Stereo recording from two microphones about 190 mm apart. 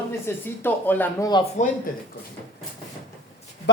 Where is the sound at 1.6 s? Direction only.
40° left (ahead or behind).